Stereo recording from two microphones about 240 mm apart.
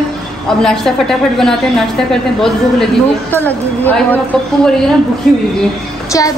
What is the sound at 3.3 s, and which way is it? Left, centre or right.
A woman's voice, centre.